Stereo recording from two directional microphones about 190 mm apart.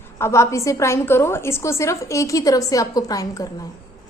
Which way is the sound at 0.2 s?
15° left (ahead or behind).